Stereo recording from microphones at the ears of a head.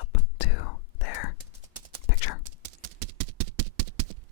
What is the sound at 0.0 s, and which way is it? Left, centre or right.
Whispering, left.